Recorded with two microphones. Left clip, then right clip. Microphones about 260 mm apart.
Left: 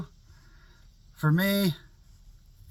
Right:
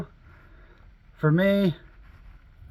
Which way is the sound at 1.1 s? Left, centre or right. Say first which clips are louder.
Right 5 dB; left.